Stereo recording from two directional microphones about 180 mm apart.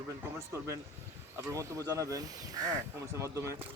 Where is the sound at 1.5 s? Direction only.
15° right (ahead or behind).